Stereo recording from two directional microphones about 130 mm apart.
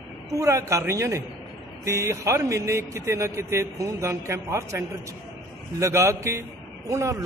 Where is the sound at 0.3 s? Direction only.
25° right (ahead or behind).